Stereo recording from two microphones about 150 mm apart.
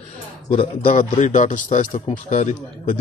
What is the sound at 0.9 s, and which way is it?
A man's voice, 55° left (ahead or behind).